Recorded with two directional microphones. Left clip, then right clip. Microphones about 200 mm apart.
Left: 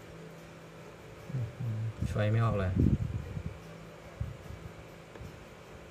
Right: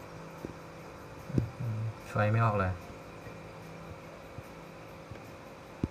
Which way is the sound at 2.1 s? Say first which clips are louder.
Right 4 dB; 30° left (ahead or behind).